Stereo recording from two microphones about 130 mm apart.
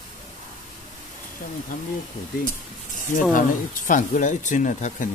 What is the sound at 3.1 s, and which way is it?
Speech, 90° left.